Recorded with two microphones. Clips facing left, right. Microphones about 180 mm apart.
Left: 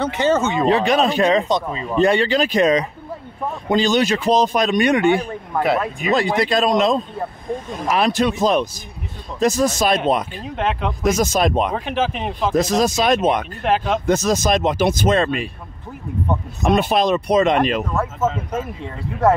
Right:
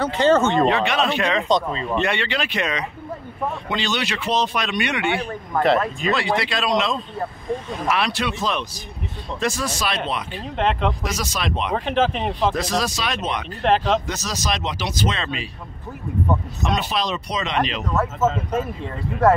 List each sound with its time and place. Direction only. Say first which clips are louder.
0.0 s speech: right 1 dB; 15° left (ahead or behind)
0.7 s speech: left 4 dB; 35° left (ahead or behind)
1.5 s speech: right 1 dB; 10° left (ahead or behind)
2.0 s speech: left 10 dB; 40° left (ahead or behind)
5.6 s speech: right 1 dB; 5° left (ahead or behind)
6.1 s speech: left 9 dB; 45° left (ahead or behind)
10.5 s speech: right 1 dB; 5° left (ahead or behind)
11.0 s speech: left 10 dB; 50° left (ahead or behind)
11.7 s speech: right 1 dB; 5° left (ahead or behind)
12.5 s speech: left 7 dB; 45° left (ahead or behind)
13.7 s speech: right 1 dB; 5° left (ahead or behind)
14.0 s speech: left 10 dB; 50° left (ahead or behind)
16.6 s speech: left 8 dB; 50° left (ahead or behind)
17.9 s speech: even; centre (ahead or behind)